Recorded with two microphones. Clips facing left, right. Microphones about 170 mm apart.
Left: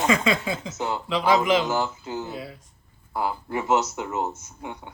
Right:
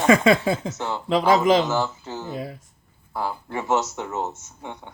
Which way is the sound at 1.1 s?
45° right (ahead or behind).